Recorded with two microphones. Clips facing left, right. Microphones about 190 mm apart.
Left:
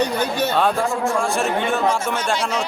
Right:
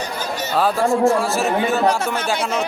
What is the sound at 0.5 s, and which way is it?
Speech, centre (ahead or behind).